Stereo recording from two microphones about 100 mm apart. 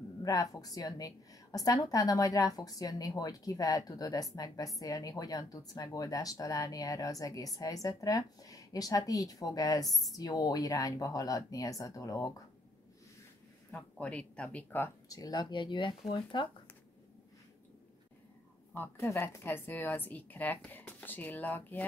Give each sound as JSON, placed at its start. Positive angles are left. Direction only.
{"t": 0.2, "sound": "a woman's voice", "side_deg": 35}
{"t": 13.7, "sound": "speech", "side_deg": 15}
{"t": 15.0, "sound": "speech", "side_deg": 40}
{"t": 18.9, "sound": "speech", "side_deg": 25}